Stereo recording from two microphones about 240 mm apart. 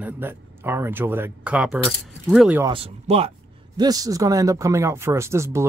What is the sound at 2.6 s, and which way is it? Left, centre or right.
Speech, right.